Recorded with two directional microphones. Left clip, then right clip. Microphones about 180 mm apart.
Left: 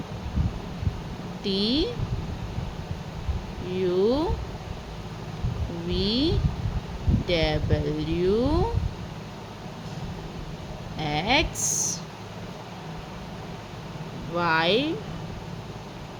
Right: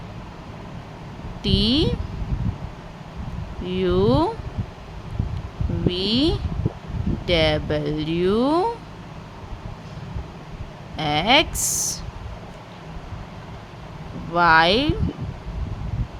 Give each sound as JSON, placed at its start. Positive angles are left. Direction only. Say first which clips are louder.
{"t": 1.5, "sound": "speech", "louder": "right 5 dB", "side_deg": -50}
{"t": 3.7, "sound": "speech", "louder": "right 3 dB", "side_deg": -50}
{"t": 5.9, "sound": "speech", "louder": "right 4 dB", "side_deg": -45}
{"t": 10.9, "sound": "speech", "louder": "right 6 dB", "side_deg": -45}
{"t": 14.3, "sound": "speech", "louder": "right 7 dB", "side_deg": -50}